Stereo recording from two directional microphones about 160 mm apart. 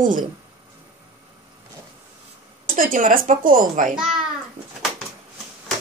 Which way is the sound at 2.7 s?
55° right (ahead or behind).